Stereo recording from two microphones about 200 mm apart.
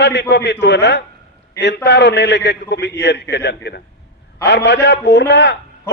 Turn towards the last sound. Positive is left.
turn(degrees=60)  # may be behind; listen again after turning